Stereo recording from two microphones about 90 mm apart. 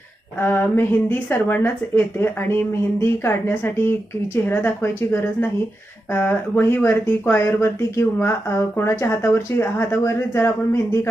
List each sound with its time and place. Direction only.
0.3 s speech: 25° left (ahead or behind)